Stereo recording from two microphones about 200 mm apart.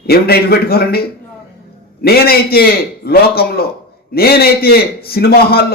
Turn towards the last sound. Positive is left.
turn(degrees=50)  # may be behind; listen again after turning